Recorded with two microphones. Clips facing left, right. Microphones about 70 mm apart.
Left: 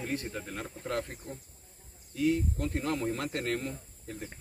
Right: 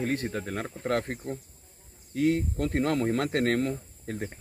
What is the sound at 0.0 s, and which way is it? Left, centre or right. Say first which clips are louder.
Speech: right 6 dB; right.